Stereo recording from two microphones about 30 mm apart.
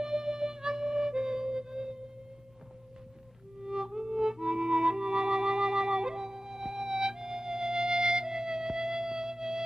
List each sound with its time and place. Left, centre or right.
0.0 s music: centre
3.6 s music: right